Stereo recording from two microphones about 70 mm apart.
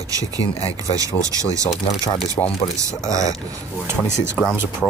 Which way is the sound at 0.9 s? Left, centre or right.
Right.